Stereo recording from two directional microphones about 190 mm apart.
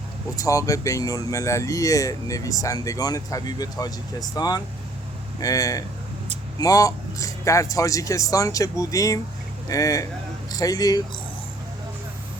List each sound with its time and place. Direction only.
0.3 s speech: 15° left (ahead or behind)